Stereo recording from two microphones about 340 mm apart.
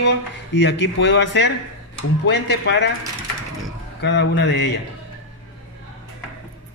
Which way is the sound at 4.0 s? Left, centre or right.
Left.